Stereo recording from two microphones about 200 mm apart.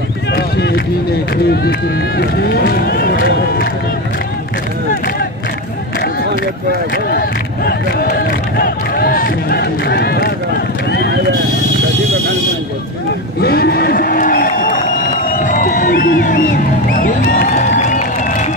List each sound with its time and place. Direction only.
0.3 s run: 55° left (ahead or behind)
7.1 s crowd: 50° left (ahead or behind)
13.4 s a sound: 50° left (ahead or behind)
17.7 s music: 35° left (ahead or behind)